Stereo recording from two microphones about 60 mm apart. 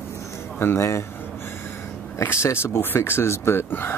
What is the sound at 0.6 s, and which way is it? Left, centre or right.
Speech, left.